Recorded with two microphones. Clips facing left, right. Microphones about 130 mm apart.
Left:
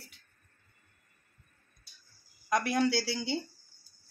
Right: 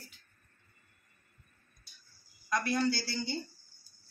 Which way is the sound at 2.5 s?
75° left (ahead or behind).